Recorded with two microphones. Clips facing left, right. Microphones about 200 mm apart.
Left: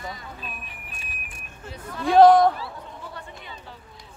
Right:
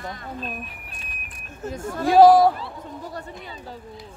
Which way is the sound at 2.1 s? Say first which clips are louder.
Right 1 dB; 5° right (ahead or behind).